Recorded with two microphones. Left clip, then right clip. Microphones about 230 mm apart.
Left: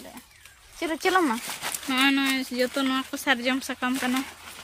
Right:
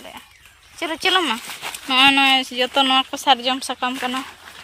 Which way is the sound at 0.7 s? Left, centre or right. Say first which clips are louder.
Right 4 dB; centre.